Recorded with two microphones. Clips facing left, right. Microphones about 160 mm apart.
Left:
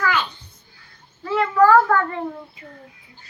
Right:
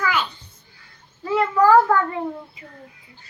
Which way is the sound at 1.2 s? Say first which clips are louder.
Left 1 dB; 15° right (ahead or behind).